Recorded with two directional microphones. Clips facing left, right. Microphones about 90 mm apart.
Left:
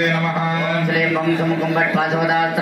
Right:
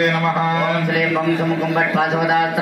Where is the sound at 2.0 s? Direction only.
50° right (ahead or behind).